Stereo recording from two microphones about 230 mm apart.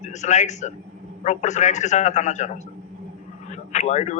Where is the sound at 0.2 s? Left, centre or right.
Left.